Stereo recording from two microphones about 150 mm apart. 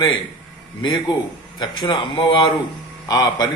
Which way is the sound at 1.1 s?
30° left (ahead or behind).